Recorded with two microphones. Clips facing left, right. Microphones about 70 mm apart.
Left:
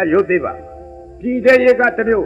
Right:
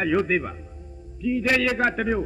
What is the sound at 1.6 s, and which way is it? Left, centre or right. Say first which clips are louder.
Speech: left 11 dB; left.